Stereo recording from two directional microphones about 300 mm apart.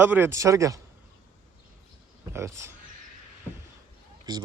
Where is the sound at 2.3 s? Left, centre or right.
Centre.